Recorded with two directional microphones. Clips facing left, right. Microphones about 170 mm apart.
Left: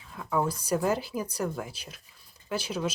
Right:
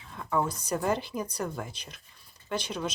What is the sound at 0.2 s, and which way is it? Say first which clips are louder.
Speech: left 1 dB; 5° left (ahead or behind).